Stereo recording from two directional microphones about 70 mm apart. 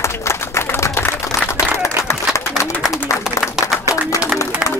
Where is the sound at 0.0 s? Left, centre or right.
Left.